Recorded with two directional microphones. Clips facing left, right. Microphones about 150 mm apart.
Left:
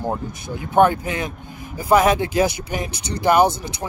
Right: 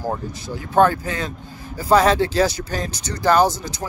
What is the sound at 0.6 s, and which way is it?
Speech, 20° left (ahead or behind).